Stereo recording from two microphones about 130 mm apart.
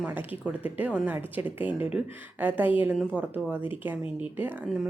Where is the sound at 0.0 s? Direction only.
15° right (ahead or behind).